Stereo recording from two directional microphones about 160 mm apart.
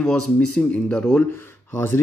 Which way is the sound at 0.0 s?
5° left (ahead or behind).